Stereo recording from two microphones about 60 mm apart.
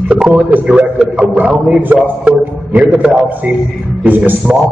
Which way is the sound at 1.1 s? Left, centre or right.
Centre.